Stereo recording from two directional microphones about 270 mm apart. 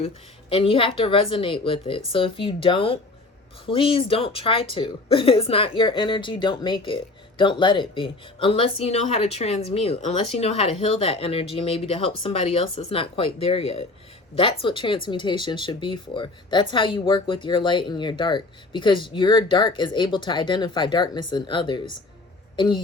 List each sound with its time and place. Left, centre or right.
0.5 s a woman's voice: centre